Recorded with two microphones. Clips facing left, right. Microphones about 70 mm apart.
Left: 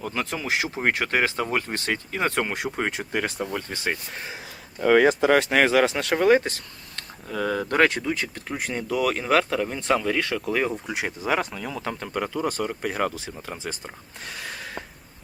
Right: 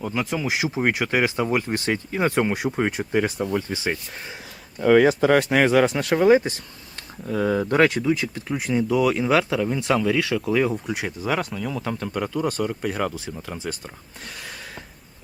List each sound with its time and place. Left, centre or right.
0.1 s speech: centre
2.6 s speech: centre
4.8 s speech: centre
6.9 s speech: centre
8.0 s speech: left
10.8 s speech: centre